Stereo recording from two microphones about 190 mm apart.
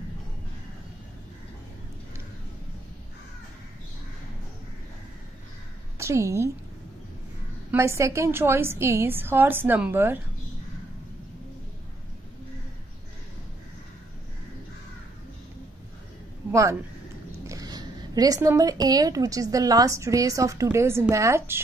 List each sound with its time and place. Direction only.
5.9 s a woman's voice: 15° right (ahead or behind)
7.7 s a woman's voice: 15° right (ahead or behind)
17.5 s a woman's voice: 20° right (ahead or behind)